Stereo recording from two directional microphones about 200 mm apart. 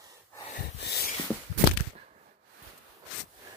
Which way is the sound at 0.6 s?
50° left (ahead or behind).